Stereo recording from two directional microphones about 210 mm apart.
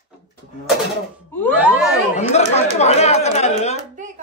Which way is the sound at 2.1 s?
30° left (ahead or behind).